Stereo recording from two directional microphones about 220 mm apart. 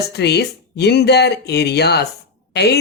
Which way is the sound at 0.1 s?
50° left (ahead or behind).